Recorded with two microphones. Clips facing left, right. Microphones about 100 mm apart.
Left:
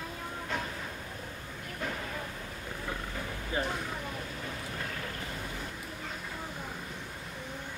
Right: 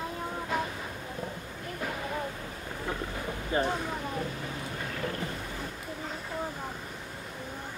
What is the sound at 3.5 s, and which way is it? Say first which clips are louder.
Speech: right 5 dB; 40° right (ahead or behind).